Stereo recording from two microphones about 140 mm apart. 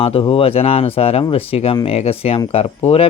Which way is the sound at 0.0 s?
40° left (ahead or behind).